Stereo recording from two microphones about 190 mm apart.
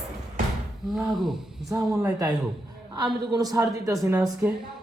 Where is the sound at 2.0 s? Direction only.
20° right (ahead or behind).